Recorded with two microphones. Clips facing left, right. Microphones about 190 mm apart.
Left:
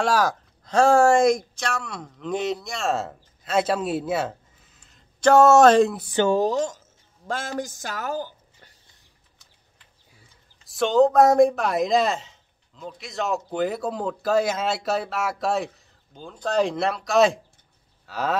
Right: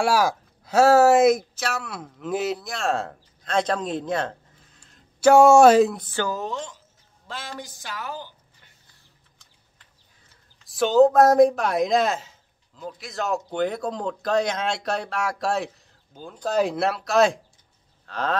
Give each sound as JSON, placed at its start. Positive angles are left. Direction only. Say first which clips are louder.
{"t": 0.0, "sound": "speech", "louder": "right 1 dB", "side_deg": -10}
{"t": 5.3, "sound": "speech", "louder": "right 1 dB", "side_deg": -10}
{"t": 5.9, "sound": "speech", "louder": "left 5 dB", "side_deg": 15}
{"t": 6.2, "sound": "a woman's voice", "louder": "left 11 dB", "side_deg": 35}
{"t": 10.6, "sound": "speech", "louder": "right 2 dB", "side_deg": 0}